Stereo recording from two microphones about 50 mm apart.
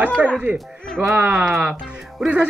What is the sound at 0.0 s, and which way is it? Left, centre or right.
Goat, right.